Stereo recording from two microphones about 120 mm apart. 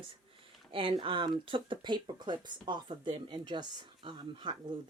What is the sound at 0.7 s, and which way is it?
Speech, 50° right (ahead or behind).